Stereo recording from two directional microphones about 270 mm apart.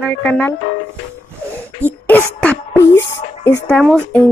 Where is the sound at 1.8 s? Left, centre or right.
Centre.